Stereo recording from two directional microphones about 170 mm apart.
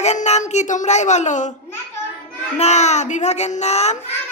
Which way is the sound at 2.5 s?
40° left (ahead or behind).